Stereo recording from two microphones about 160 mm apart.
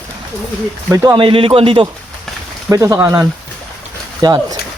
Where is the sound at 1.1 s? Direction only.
35° right (ahead or behind).